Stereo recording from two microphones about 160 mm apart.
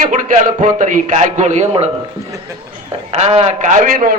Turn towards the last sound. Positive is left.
turn(degrees=-60)  # may be behind; listen again after turning